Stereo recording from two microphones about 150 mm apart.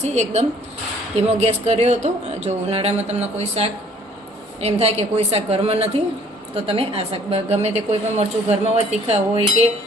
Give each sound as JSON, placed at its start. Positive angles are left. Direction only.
{"t": 0.0, "sound": "a woman's voice", "side_deg": -50}